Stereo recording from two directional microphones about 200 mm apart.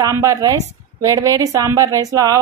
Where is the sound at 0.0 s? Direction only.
15° right (ahead or behind).